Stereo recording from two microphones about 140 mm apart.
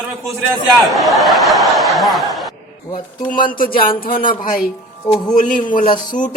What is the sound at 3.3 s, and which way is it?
A man's voice, 80° left.